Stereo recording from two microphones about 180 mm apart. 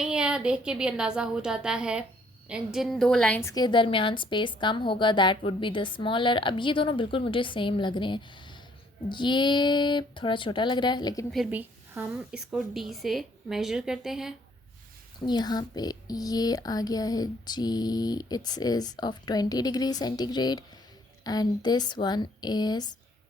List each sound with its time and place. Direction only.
0.0 s a woman's voice: 5° right (ahead or behind)
3.5 s speech: 25° left (ahead or behind)
11.5 s a woman's voice: 10° right (ahead or behind)
15.3 s speech: 25° left (ahead or behind)